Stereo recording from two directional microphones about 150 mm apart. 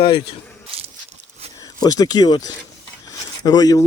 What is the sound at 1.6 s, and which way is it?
Speech, 25° left (ahead or behind).